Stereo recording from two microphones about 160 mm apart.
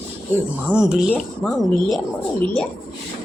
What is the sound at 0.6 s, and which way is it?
Speech, 5° right (ahead or behind).